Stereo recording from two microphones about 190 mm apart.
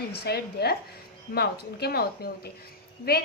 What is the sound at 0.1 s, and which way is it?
A woman's voice, 55° left (ahead or behind).